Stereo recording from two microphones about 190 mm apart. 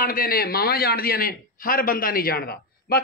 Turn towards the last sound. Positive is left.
turn(degrees=55)  # may be behind; listen again after turning